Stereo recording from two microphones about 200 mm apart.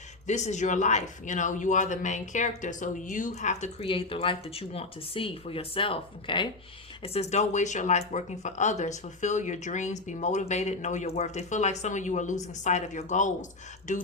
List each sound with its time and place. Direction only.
0.3 s speech: 35° left (ahead or behind)